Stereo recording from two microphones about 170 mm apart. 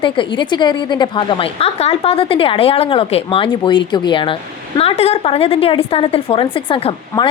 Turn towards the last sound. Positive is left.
turn(degrees=30)  # may be behind; listen again after turning